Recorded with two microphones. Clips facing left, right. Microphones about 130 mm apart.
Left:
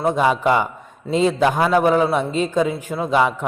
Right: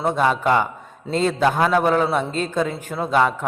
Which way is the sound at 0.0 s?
10° left (ahead or behind).